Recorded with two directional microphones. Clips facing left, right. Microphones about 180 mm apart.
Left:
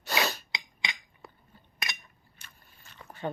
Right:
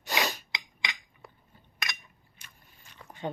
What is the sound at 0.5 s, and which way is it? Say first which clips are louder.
Cutlery: even; 25° left (ahead or behind).